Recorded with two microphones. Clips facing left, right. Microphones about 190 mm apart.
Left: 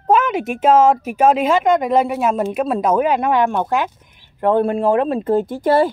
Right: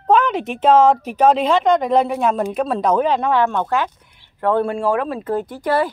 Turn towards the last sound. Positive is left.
turn(degrees=25)  # may be behind; listen again after turning